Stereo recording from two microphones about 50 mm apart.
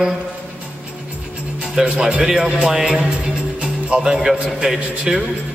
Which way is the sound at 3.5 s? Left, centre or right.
Right.